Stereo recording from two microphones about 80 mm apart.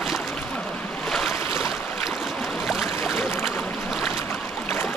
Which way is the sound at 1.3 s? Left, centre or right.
Left.